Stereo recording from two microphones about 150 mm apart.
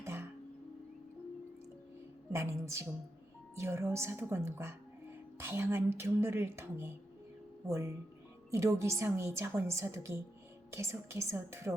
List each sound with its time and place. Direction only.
0.0 s music: 15° right (ahead or behind)
2.3 s a woman's voice: 20° right (ahead or behind)